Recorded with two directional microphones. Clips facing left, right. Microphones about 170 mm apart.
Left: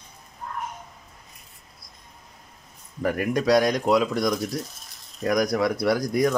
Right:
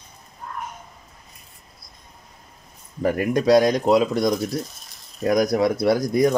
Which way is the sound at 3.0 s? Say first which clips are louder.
Right 3 dB; 25° right (ahead or behind).